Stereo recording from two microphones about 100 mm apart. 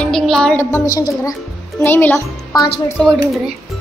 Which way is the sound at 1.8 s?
20° left (ahead or behind).